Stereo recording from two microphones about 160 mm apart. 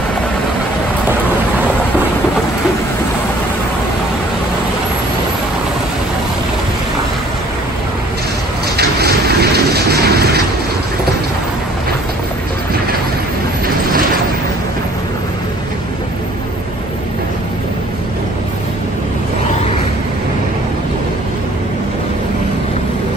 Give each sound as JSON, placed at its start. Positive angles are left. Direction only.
{"t": 8.7, "sound": "vehicle", "side_deg": -80}